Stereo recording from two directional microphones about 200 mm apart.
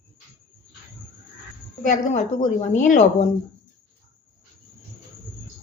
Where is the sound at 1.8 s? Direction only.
40° left (ahead or behind).